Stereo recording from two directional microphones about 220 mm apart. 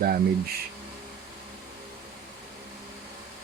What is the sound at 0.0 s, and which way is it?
Speech, 45° right (ahead or behind).